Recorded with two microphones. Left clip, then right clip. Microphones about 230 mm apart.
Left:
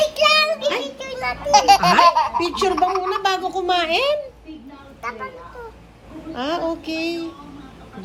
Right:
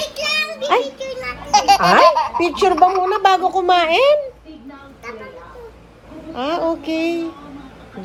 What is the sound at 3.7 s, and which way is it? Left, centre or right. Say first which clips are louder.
Speech: right 6 dB; centre.